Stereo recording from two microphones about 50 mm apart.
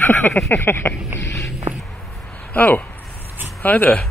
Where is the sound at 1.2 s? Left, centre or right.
Left.